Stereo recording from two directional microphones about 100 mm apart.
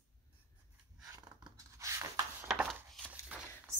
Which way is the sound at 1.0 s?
35° right (ahead or behind).